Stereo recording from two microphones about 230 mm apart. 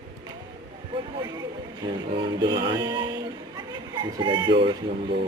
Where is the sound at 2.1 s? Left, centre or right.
Right.